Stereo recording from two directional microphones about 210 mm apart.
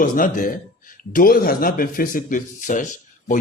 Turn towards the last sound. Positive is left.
turn(degrees=35)  # may be behind; listen again after turning